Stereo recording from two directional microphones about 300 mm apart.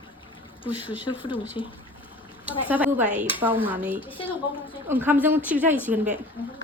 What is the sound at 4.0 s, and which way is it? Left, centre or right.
Speech, centre.